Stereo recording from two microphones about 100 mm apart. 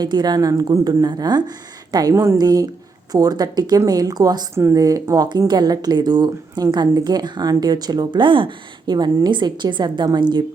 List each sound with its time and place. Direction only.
0.0 s speech: 45° right (ahead or behind)
4.5 s a woman's voice: 30° right (ahead or behind); by 10.4 s 50° right (ahead or behind)